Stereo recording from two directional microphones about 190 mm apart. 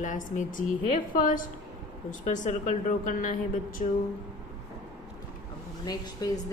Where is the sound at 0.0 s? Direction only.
40° left (ahead or behind).